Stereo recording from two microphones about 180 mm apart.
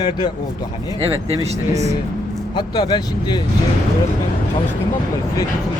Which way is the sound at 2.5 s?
25° left (ahead or behind).